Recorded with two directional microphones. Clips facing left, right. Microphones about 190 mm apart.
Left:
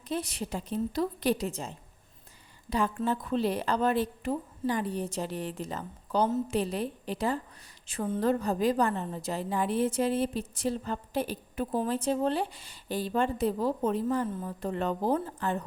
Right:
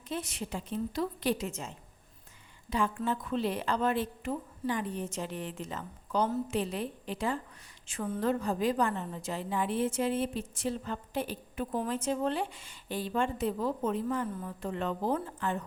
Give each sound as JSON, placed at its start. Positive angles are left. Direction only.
{"t": 0.1, "sound": "a woman's voice", "side_deg": 35}